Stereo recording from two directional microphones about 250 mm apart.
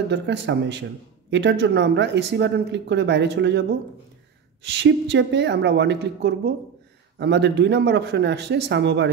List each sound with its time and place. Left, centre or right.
0.1 s speech: right
4.6 s speech: right